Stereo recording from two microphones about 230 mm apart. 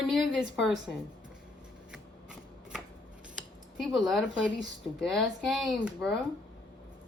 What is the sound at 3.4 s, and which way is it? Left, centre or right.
Speech, centre.